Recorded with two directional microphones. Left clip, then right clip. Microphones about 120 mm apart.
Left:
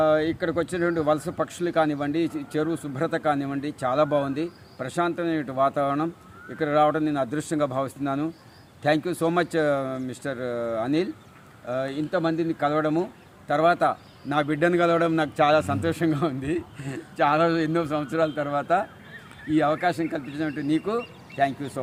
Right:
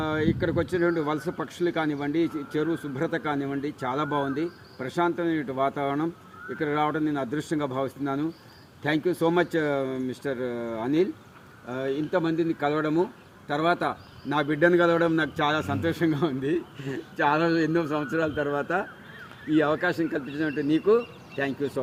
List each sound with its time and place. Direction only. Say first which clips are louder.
0.0 s a man's voice: left 5 dB; 45° left (ahead or behind)